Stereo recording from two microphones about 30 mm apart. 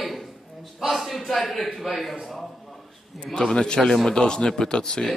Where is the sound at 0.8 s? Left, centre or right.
Centre.